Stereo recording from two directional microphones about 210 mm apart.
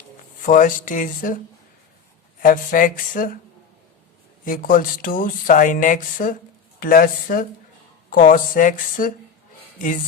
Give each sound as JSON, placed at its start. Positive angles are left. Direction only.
{"t": 0.4, "sound": "speech", "side_deg": 40}
{"t": 2.4, "sound": "speech", "side_deg": 40}
{"t": 4.4, "sound": "speech", "side_deg": 40}